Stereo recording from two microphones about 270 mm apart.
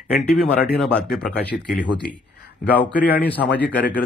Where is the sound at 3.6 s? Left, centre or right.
Centre.